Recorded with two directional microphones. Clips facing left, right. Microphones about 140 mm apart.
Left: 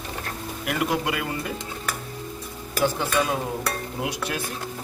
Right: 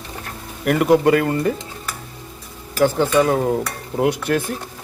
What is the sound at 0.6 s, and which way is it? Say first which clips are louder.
Speech: right 11 dB; 50° right (ahead or behind).